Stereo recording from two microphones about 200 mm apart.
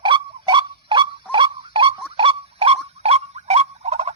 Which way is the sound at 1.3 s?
25° right (ahead or behind).